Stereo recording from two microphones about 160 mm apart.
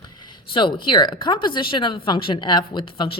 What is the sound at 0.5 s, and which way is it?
Speech, 30° left (ahead or behind).